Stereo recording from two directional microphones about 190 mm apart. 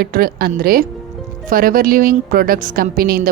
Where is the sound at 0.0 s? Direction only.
50° right (ahead or behind).